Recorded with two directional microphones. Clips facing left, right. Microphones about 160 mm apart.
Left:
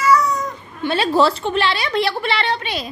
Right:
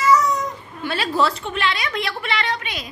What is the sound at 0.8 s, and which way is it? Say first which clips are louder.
A woman's voice: left 5 dB; 25° left (ahead or behind).